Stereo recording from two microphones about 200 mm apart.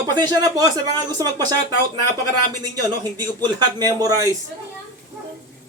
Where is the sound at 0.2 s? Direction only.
20° right (ahead or behind).